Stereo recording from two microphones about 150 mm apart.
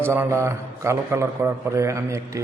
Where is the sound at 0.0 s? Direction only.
15° right (ahead or behind).